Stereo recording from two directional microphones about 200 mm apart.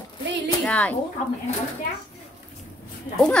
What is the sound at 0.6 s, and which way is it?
Speech, 5° left (ahead or behind).